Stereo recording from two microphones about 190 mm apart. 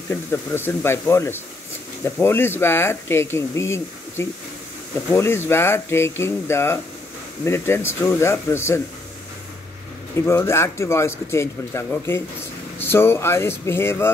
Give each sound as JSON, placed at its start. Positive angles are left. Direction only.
{"t": 0.1, "sound": "speech", "side_deg": 10}
{"t": 10.2, "sound": "speech", "side_deg": 15}